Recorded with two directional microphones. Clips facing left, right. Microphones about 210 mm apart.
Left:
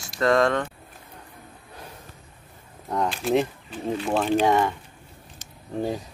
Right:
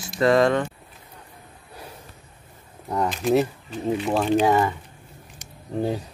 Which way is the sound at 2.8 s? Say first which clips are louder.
Right 1 dB; 10° right (ahead or behind).